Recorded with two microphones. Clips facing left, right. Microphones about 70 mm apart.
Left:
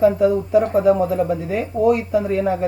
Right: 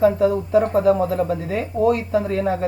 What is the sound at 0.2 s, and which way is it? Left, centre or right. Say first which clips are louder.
A woman's voice: left 1 dB; centre.